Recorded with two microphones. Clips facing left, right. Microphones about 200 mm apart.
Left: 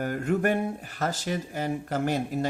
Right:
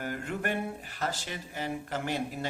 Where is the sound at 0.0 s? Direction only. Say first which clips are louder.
Left 8 dB; 45° left (ahead or behind).